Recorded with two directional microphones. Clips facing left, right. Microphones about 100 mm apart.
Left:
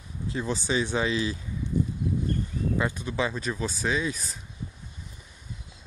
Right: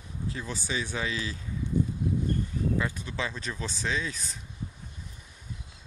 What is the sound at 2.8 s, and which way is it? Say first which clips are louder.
Speech: left 4 dB; 20° left (ahead or behind).